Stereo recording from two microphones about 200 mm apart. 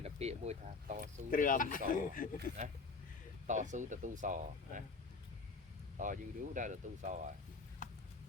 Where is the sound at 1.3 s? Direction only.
40° left (ahead or behind).